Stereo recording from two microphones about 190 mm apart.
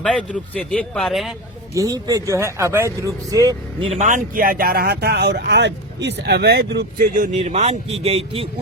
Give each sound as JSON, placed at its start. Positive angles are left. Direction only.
{"t": 0.0, "sound": "speech", "side_deg": 5}
{"t": 1.7, "sound": "speech", "side_deg": -20}
{"t": 3.8, "sound": "speech", "side_deg": -35}